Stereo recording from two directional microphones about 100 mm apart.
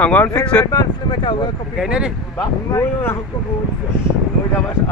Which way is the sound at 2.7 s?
25° left (ahead or behind).